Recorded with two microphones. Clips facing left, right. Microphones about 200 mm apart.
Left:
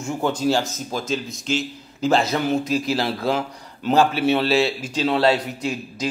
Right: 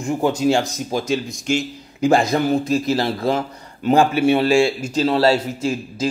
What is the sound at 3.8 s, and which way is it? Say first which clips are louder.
A man's voice: right 3 dB; 10° right (ahead or behind).